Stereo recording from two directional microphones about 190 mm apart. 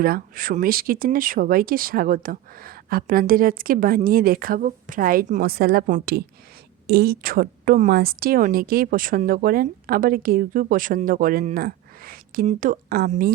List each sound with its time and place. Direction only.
0.0 s speech: 50° right (ahead or behind)